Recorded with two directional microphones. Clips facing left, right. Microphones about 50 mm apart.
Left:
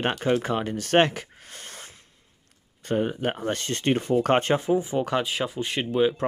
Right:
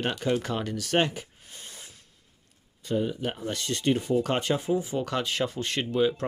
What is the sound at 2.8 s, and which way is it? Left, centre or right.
Speech, left.